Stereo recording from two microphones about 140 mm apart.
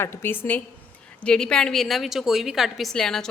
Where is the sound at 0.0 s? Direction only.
15° left (ahead or behind).